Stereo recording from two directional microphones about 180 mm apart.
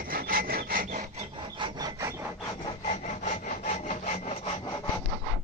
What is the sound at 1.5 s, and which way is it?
Rub, 25° right (ahead or behind).